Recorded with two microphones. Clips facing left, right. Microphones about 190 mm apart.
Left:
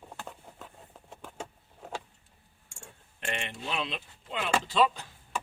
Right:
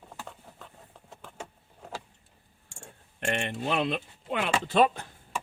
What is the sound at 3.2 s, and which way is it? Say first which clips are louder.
Speech: right 6 dB; 50° right (ahead or behind).